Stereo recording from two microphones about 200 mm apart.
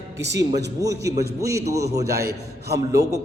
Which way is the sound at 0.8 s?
15° right (ahead or behind).